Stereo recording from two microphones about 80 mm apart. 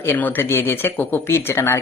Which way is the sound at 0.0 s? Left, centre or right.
Left.